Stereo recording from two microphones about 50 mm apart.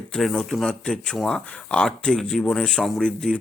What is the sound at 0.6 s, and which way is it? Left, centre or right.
Speech, centre.